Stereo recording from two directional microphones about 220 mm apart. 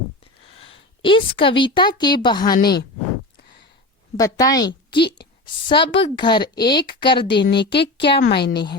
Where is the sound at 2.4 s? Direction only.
45° left (ahead or behind).